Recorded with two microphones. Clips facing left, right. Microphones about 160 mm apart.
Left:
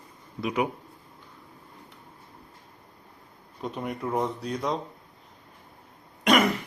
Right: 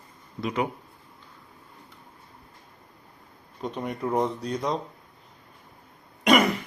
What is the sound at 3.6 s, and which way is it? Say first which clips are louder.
Speech: right 2 dB; centre (ahead or behind).